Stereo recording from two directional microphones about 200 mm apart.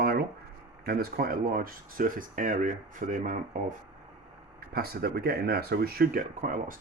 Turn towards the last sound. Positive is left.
turn(degrees=-40)  # may be behind; listen again after turning